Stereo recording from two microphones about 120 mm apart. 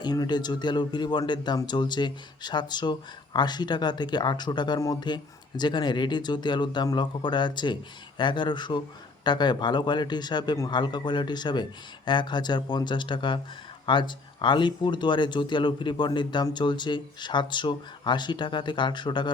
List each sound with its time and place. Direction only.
0.0 s speech: 35° left (ahead or behind)